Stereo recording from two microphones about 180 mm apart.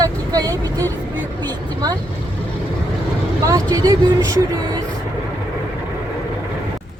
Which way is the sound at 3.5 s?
20° right (ahead or behind).